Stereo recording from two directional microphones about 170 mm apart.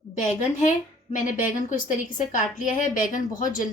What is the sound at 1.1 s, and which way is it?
A woman's voice, 50° left (ahead or behind).